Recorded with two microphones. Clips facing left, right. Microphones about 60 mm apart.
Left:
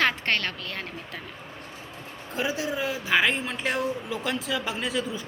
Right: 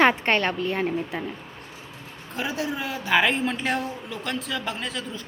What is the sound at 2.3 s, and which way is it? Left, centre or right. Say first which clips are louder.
A woman's voice: even; centre.